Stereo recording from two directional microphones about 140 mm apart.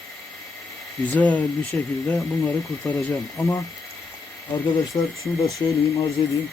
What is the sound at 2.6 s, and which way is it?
Speech, 20° left (ahead or behind).